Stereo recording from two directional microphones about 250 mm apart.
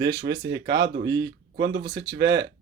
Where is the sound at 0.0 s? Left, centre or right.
Right.